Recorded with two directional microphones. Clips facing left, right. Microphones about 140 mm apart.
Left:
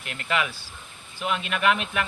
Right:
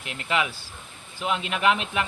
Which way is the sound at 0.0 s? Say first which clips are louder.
Right 1 dB; 20° right (ahead or behind).